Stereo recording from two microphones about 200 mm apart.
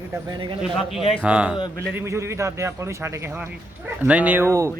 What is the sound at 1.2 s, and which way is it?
A man's voice, 5° right (ahead or behind).